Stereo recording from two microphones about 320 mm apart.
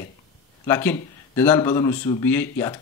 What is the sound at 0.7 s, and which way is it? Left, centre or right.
Speech, centre.